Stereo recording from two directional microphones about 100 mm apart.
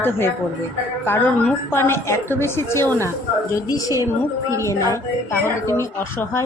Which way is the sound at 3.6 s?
40° left (ahead or behind).